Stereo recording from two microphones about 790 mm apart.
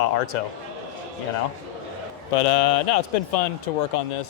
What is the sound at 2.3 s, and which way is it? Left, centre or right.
Speech, left.